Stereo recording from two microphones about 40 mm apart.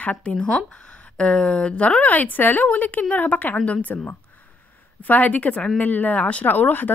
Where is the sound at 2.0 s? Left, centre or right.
Left.